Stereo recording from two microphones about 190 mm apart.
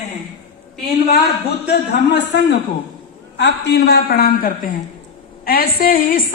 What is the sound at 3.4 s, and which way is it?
A woman's voice, 60° left (ahead or behind).